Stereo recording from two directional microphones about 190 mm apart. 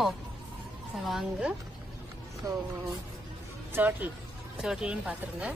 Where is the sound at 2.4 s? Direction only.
15° right (ahead or behind).